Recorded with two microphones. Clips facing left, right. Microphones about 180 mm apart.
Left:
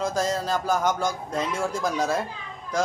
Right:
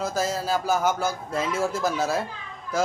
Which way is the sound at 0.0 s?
5° right (ahead or behind).